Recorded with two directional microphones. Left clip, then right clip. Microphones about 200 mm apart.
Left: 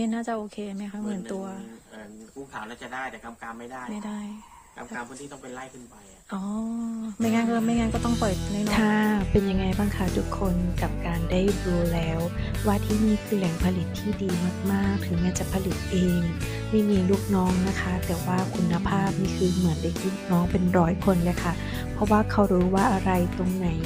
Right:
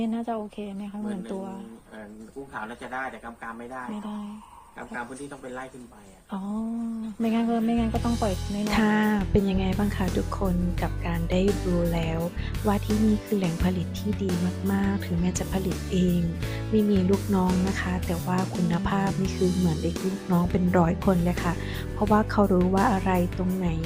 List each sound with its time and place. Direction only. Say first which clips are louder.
0.0 s music: left 1 dB; 25° left (ahead or behind)
2.6 s speech: right 2 dB; 5° left (ahead or behind)
7.2 s music: left 1 dB; 30° left (ahead or behind)
8.6 s speech: even; centre (ahead or behind)